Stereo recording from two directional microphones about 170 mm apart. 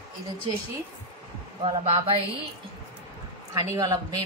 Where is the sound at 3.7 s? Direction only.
20° right (ahead or behind).